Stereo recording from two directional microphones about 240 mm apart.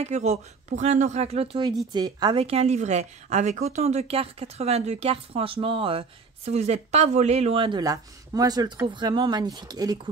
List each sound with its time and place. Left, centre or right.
0.0 s a woman's voice: right